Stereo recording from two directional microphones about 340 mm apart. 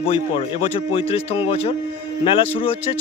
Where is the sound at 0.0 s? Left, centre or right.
Centre.